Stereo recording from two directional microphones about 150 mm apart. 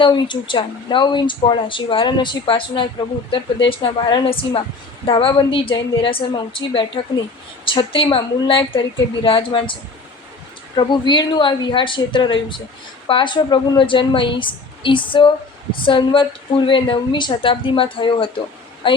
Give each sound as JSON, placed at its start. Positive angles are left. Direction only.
{"t": 0.0, "sound": "speech", "side_deg": 35}
{"t": 10.8, "sound": "speech", "side_deg": 30}